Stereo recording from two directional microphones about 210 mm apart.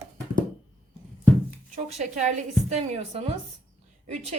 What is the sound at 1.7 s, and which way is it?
A woman's voice, 30° right (ahead or behind).